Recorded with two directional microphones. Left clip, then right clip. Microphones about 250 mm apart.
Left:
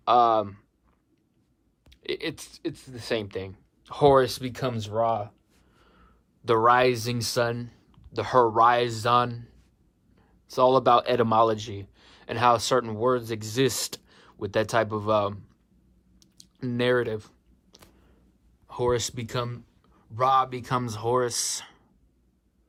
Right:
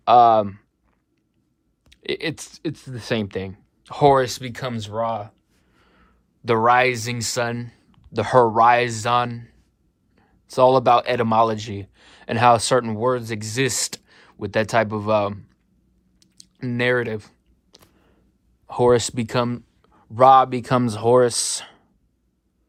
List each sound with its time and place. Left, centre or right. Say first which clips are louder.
0.0 s speech: right 7 dB; centre
1.8 s a sound: right 5 dB; centre
2.5 s speech: right 4 dB; centre
16.2 s computer keyboard: right 3 dB; centre
18.7 s speech: right 9 dB; centre